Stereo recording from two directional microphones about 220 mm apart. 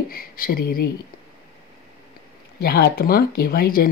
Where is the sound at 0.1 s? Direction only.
40° left (ahead or behind).